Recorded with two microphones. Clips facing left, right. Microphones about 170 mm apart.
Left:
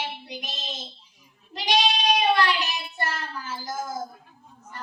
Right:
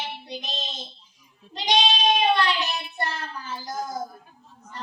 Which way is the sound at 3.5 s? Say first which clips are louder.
Right 1 dB; 20° right (ahead or behind).